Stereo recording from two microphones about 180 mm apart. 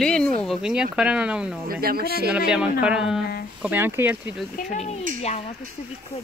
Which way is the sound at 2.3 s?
5° right (ahead or behind).